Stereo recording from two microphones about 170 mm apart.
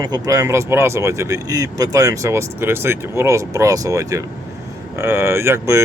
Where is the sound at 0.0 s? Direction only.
20° right (ahead or behind).